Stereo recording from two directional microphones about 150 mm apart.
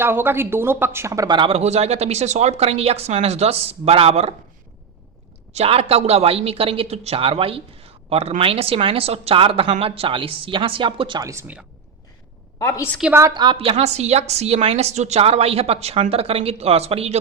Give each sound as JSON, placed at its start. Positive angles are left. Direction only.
{"t": 0.0, "sound": "speech", "side_deg": -15}
{"t": 5.5, "sound": "speech", "side_deg": -40}
{"t": 11.2, "sound": "speech", "side_deg": -20}
{"t": 12.5, "sound": "a woman's voice", "side_deg": 20}
{"t": 13.1, "sound": "speech", "side_deg": -25}